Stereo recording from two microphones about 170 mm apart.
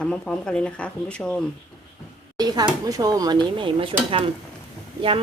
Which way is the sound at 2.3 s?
25° right (ahead or behind).